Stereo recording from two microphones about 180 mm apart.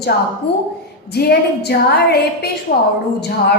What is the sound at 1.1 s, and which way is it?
A woman's voice, 65° left (ahead or behind).